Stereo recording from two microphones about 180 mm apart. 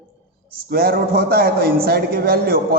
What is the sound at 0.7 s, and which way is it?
A man's voice, 60° right (ahead or behind).